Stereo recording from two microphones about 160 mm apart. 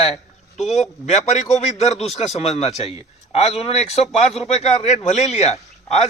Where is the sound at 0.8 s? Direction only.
45° left (ahead or behind).